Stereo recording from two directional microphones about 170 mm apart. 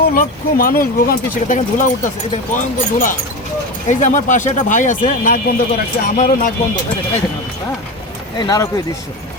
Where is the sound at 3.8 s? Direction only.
45° left (ahead or behind).